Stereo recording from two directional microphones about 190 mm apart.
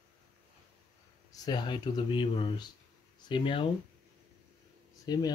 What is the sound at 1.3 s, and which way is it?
Speech, 20° left (ahead or behind).